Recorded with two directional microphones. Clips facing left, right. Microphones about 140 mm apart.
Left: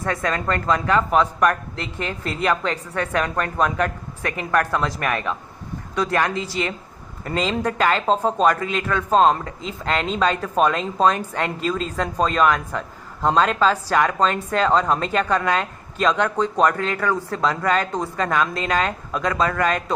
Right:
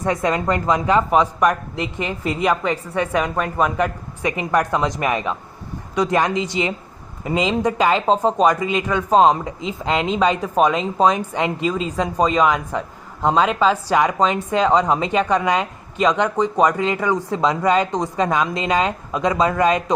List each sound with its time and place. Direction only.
0.0 s speech: 20° right (ahead or behind)